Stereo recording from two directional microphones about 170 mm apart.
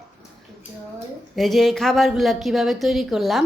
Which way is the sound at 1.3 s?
Centre (ahead or behind).